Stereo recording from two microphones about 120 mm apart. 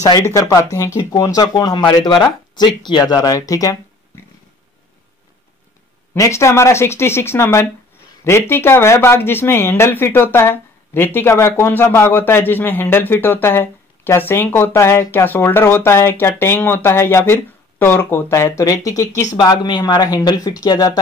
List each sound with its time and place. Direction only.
0.3 s speech: 30° left (ahead or behind)
6.1 s speech: 25° left (ahead or behind)